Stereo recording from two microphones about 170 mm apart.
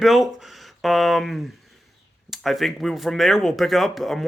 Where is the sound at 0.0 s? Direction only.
Centre (ahead or behind).